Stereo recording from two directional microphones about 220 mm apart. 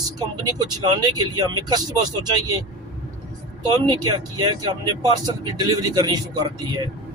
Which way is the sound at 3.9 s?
20° right (ahead or behind).